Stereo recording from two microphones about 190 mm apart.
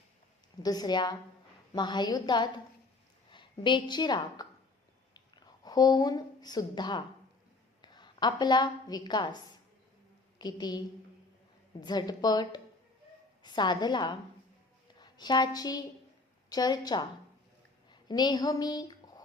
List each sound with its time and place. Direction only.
0.6 s a woman's voice: 20° left (ahead or behind)
5.6 s a woman's voice: 20° left (ahead or behind)